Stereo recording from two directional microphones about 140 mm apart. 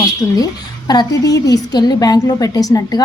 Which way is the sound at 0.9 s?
30° left (ahead or behind).